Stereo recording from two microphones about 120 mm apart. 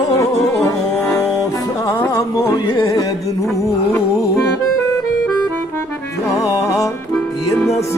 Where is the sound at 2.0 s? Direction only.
25° left (ahead or behind).